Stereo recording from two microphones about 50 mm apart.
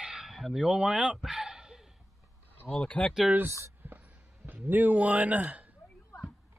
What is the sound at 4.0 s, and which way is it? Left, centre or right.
Speech, right.